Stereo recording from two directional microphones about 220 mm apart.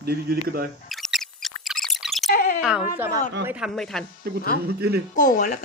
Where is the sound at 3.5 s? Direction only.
Centre (ahead or behind).